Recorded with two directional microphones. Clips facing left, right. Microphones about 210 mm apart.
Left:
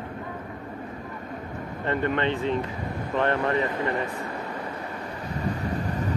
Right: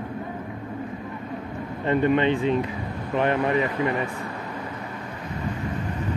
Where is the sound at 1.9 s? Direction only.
15° right (ahead or behind).